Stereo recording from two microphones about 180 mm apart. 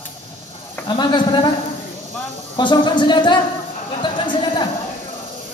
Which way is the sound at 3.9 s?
25° left (ahead or behind).